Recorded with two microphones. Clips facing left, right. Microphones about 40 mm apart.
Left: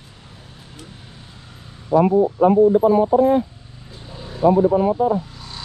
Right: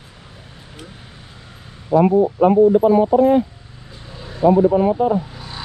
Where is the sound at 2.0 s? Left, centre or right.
Right.